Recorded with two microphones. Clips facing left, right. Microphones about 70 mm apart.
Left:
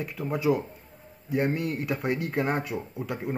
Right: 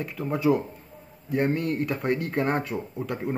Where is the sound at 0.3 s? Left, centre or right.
Centre.